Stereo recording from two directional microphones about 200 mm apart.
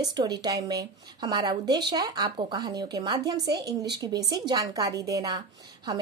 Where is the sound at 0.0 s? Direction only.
20° right (ahead or behind).